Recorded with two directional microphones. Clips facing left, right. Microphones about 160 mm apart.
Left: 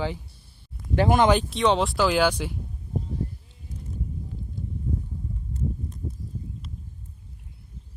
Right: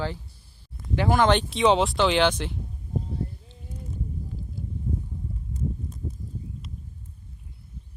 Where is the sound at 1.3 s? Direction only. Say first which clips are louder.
Right 1 dB; centre (ahead or behind).